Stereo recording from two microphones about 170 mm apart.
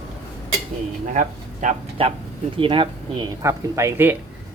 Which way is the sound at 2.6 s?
30° right (ahead or behind).